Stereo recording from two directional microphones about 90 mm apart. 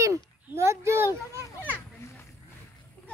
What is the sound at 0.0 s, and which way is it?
Children playing, 35° right (ahead or behind).